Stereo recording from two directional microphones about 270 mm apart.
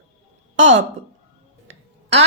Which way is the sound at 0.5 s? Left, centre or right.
Right.